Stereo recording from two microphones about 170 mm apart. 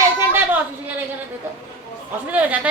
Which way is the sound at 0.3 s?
10° right (ahead or behind).